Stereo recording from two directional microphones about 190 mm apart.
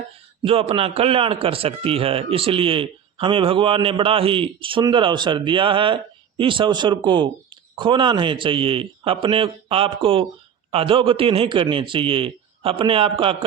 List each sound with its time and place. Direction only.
0.4 s a man's voice: 30° right (ahead or behind)